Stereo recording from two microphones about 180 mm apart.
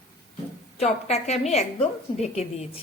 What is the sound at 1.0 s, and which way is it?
A woman's voice, 40° left (ahead or behind).